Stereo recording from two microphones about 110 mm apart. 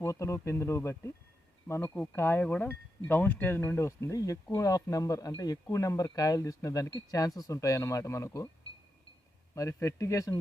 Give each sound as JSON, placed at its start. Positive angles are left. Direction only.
{"t": 0.0, "sound": "speech", "side_deg": 25}
{"t": 9.6, "sound": "speech", "side_deg": 30}